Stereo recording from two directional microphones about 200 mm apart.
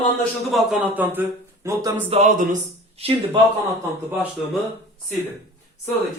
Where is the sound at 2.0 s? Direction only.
35° right (ahead or behind).